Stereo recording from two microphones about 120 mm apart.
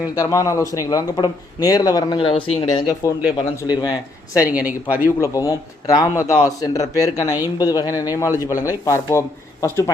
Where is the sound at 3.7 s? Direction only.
35° left (ahead or behind).